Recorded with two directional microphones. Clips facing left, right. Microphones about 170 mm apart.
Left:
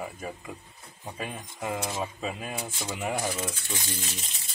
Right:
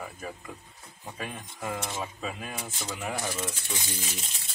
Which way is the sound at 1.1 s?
5° left (ahead or behind).